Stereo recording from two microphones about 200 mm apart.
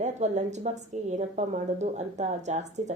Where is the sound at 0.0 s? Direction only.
35° right (ahead or behind).